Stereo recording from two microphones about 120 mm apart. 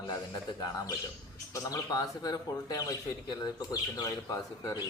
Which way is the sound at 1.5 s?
30° left (ahead or behind).